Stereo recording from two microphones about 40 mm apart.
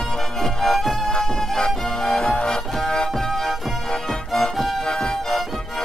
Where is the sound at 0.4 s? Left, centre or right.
Centre.